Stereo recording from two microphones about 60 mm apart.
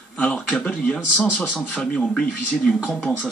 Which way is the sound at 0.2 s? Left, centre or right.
Centre.